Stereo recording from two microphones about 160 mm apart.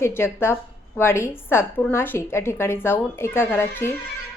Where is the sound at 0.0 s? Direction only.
15° left (ahead or behind).